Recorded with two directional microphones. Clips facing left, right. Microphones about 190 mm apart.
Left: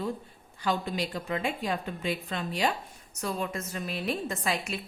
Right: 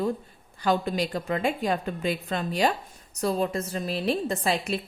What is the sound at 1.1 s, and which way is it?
A woman's voice, 45° right (ahead or behind).